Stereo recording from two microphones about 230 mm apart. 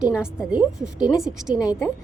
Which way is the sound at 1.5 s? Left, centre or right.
Centre.